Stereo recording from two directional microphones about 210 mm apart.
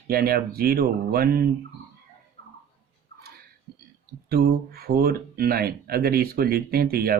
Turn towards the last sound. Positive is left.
turn(degrees=-45)  # may be behind; listen again after turning